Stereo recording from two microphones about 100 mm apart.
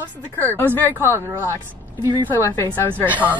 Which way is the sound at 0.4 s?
20° left (ahead or behind).